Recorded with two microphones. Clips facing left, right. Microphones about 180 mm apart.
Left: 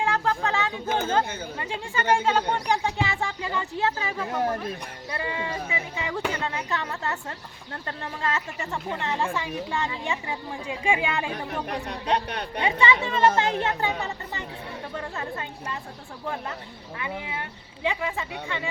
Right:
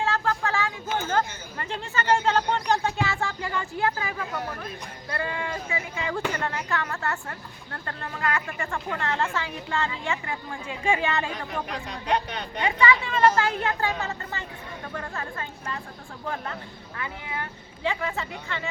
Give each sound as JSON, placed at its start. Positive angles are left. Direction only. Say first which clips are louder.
{"t": 0.0, "sound": "a sound", "louder": "left 1 dB", "side_deg": 15}
{"t": 0.9, "sound": "a sound", "louder": "left 3 dB", "side_deg": 55}
{"t": 1.5, "sound": "speech", "louder": "right 2 dB", "side_deg": 10}
{"t": 5.1, "sound": "speech", "louder": "even", "side_deg": 15}
{"t": 11.9, "sound": "speech", "louder": "even", "side_deg": 60}
{"t": 12.6, "sound": "speech", "louder": "even", "side_deg": 25}
{"t": 17.0, "sound": "speech", "louder": "left 1 dB", "side_deg": 20}